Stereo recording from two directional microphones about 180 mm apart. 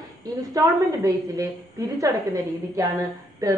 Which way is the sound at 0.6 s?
20° right (ahead or behind).